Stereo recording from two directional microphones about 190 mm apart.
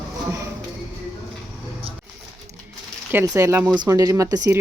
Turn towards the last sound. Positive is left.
turn(degrees=-20)  # may be behind; listen again after turning